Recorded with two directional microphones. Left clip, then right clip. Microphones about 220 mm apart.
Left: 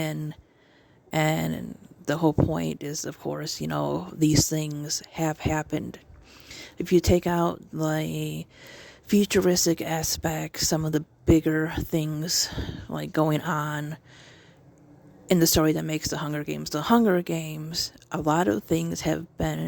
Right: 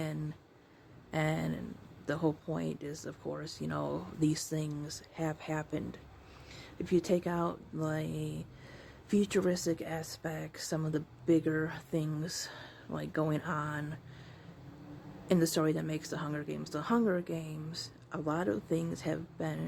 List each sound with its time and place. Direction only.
1.1 s speech: 40° left (ahead or behind)
15.3 s speech: 40° left (ahead or behind)